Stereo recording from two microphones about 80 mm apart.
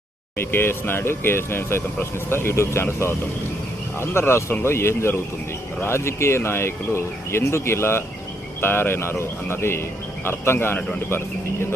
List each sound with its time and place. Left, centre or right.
0.3 s speech: left